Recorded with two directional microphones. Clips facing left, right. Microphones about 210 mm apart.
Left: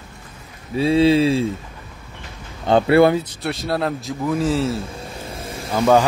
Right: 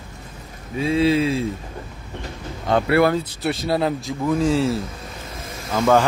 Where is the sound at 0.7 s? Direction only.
30° left (ahead or behind).